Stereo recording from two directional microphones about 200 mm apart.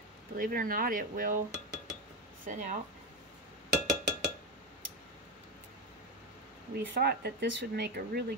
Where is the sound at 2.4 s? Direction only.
35° right (ahead or behind).